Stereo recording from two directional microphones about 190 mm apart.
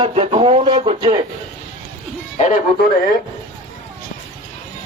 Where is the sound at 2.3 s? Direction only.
40° left (ahead or behind).